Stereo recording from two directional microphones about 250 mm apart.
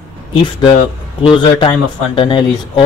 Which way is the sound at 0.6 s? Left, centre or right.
Centre.